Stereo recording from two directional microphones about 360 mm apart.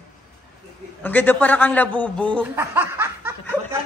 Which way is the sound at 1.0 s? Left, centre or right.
Centre.